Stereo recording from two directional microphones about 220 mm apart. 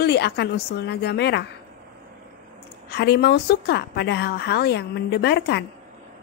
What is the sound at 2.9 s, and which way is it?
A woman's voice, 50° left (ahead or behind).